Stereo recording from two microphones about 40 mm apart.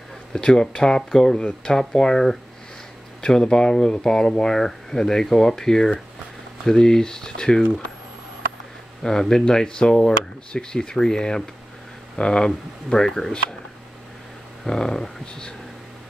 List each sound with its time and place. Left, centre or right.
0.3 s speech: centre
9.0 s speech: centre
14.6 s speech: centre